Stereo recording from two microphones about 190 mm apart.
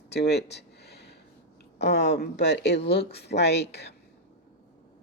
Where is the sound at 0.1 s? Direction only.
60° left (ahead or behind).